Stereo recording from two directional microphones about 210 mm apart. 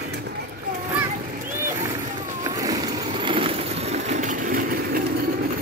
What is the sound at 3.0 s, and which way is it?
Vehicle, 25° right (ahead or behind).